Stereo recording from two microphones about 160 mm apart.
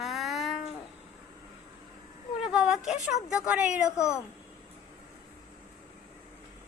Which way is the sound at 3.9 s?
20° left (ahead or behind).